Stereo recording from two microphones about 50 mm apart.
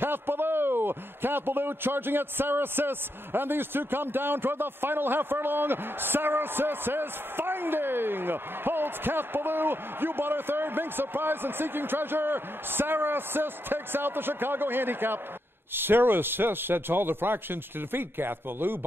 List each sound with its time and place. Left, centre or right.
0.0 s a man's voice: right